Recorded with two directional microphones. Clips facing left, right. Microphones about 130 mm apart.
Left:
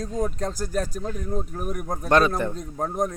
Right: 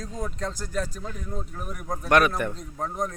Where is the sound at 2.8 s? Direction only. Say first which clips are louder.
Left 4 dB; 45° left (ahead or behind).